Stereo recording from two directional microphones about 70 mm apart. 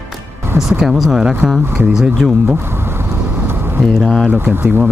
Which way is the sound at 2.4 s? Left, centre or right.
Right.